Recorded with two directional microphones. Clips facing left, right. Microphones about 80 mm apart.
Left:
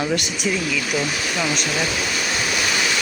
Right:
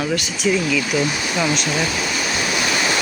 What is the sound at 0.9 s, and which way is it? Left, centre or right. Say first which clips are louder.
Speech: right 3 dB; centre.